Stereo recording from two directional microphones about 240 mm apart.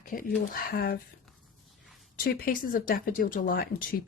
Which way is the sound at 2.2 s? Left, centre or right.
Left.